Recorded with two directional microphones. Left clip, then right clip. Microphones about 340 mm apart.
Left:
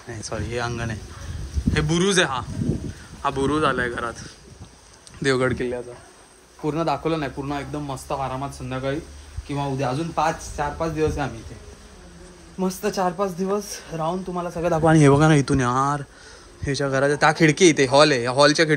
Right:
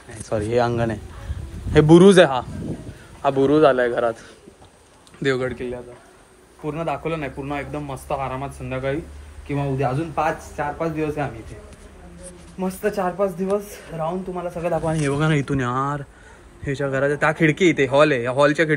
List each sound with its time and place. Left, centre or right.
0.3 s speech: centre
5.2 s speech: centre
5.5 s a man's voice: left
12.5 s speech: centre